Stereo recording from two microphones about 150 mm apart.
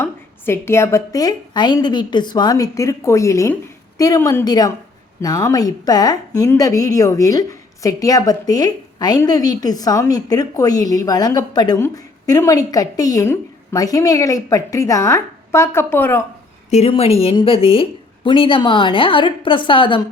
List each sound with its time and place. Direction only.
0.0 s a woman's voice: 15° left (ahead or behind)
16.6 s a woman's voice: 50° left (ahead or behind)